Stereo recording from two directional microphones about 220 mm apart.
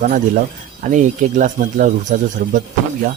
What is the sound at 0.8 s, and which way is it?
Speech, 35° right (ahead or behind).